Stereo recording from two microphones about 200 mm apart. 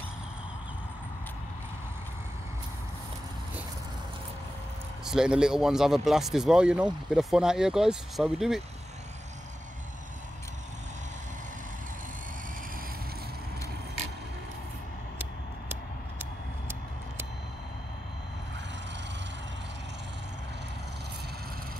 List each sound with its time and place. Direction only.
5.0 s speech: 5° right (ahead or behind)